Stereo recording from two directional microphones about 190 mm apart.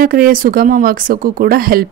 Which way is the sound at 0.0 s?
50° right (ahead or behind).